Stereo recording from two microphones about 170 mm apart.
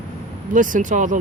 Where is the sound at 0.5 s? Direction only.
50° right (ahead or behind).